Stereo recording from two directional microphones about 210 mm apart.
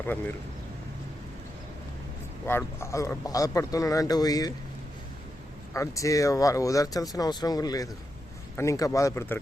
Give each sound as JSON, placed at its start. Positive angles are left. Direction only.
{"t": 0.0, "sound": "speech", "side_deg": 10}
{"t": 2.5, "sound": "speech", "side_deg": 10}
{"t": 5.7, "sound": "speech", "side_deg": 15}